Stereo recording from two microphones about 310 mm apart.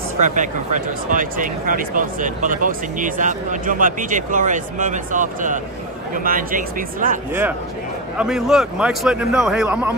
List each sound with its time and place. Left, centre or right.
0.2 s speech: right
8.2 s a man's voice: centre